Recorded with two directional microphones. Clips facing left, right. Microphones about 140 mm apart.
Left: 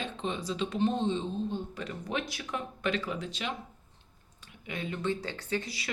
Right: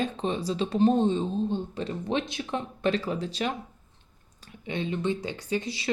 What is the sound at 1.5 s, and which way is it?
Speech, 30° right (ahead or behind).